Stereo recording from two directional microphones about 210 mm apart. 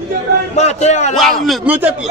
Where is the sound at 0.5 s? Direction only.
30° left (ahead or behind).